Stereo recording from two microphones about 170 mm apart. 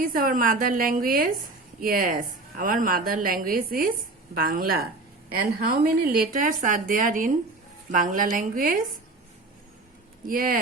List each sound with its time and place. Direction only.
0.0 s a woman's voice: 55° right (ahead or behind)
10.2 s a woman's voice: 55° right (ahead or behind)